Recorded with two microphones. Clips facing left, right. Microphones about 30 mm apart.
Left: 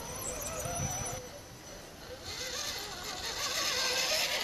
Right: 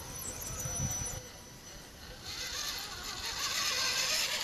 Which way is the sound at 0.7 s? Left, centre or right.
Left.